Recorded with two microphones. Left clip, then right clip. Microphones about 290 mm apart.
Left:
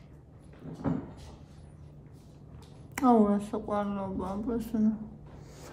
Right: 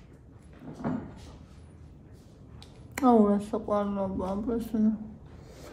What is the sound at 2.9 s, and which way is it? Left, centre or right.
Speech, centre.